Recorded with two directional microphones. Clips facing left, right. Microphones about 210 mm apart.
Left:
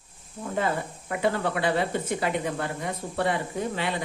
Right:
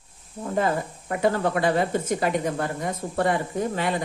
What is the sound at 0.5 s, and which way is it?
Speech, 40° right (ahead or behind).